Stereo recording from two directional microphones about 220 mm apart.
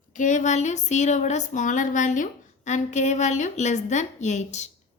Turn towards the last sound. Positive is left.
turn(degrees=30)  # may be behind; listen again after turning